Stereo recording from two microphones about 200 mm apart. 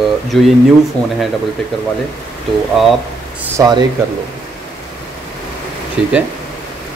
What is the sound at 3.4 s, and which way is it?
Speech, 15° right (ahead or behind).